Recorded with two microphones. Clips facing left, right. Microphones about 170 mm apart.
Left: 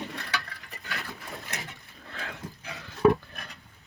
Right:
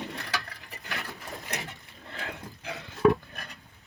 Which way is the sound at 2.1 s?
20° right (ahead or behind).